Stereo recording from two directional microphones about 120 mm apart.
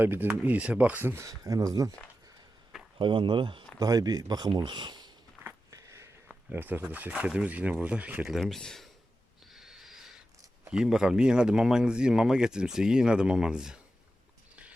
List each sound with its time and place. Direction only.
0.0 s speech: 15° right (ahead or behind)
3.0 s speech: 40° right (ahead or behind)
3.8 s speech: 30° right (ahead or behind)
5.4 s a sound: 25° right (ahead or behind)
6.2 s speech: 15° right (ahead or behind)
8.4 s speech: 5° left (ahead or behind)
9.5 s a sound: centre (ahead or behind)
10.7 s speech: 5° right (ahead or behind)